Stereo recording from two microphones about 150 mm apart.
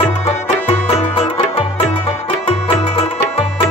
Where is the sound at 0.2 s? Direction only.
40° left (ahead or behind).